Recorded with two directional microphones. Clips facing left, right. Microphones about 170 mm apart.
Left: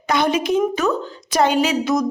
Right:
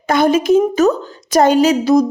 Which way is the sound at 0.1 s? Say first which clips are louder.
Right 6 dB; 45° right (ahead or behind).